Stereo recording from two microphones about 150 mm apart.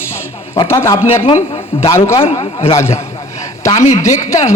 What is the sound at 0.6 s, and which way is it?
A man's voice, 20° left (ahead or behind).